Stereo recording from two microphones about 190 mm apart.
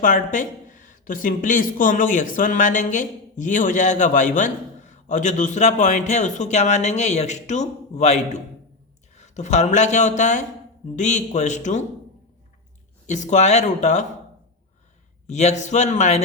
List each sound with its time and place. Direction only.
0.0 s a man's voice: 40° left (ahead or behind)
13.1 s a man's voice: 40° left (ahead or behind)
15.3 s a man's voice: 35° left (ahead or behind)